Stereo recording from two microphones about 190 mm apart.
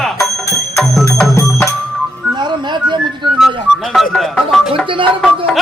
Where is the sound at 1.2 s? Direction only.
15° left (ahead or behind).